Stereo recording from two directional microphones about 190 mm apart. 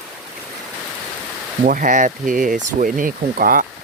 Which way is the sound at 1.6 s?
45° right (ahead or behind).